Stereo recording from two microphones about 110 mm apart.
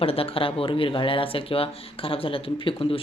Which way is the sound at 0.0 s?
60° left (ahead or behind).